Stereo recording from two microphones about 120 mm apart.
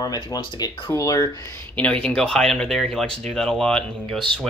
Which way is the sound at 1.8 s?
10° left (ahead or behind).